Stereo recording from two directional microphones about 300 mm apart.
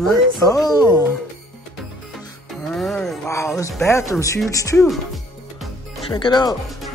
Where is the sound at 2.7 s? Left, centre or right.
Centre.